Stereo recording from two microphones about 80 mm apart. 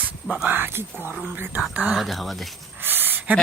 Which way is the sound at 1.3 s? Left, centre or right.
Right.